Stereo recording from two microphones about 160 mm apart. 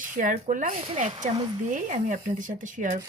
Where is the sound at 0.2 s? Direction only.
55° right (ahead or behind).